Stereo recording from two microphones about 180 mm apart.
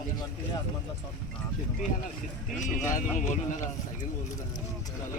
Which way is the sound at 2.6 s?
45° left (ahead or behind).